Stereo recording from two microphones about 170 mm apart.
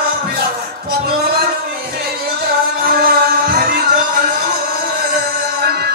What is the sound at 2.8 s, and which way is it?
Music, 65° right (ahead or behind).